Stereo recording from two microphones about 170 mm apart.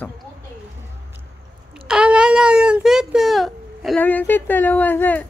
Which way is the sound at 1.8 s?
5° right (ahead or behind).